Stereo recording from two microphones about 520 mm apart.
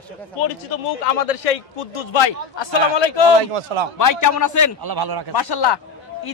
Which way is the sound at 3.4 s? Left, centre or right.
Right.